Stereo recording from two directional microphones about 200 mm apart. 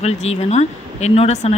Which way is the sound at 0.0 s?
30° left (ahead or behind).